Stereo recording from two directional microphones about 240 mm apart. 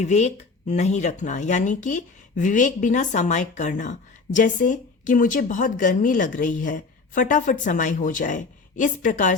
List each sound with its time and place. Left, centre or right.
0.0 s speech: left